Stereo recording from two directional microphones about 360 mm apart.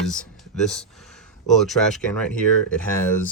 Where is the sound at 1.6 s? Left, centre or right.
Centre.